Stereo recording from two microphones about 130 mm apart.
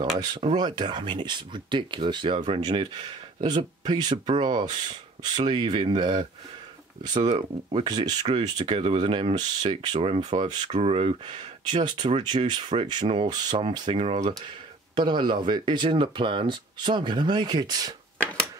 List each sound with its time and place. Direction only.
0.6 s speech: 35° right (ahead or behind)
8.5 s speech: 45° right (ahead or behind)
9.9 s speech: 45° right (ahead or behind)
10.7 s speech: 50° right (ahead or behind); by 13.6 s 35° right (ahead or behind)
13.6 s speech: 45° right (ahead or behind)
15.0 s speech: 35° right (ahead or behind)